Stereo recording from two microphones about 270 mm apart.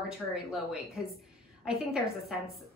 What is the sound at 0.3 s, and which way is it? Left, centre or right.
A woman's voice, centre.